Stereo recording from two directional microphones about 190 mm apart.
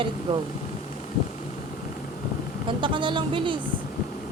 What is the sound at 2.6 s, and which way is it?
Speech, 25° right (ahead or behind).